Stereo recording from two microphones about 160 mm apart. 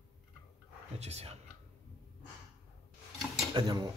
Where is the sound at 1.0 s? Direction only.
40° right (ahead or behind).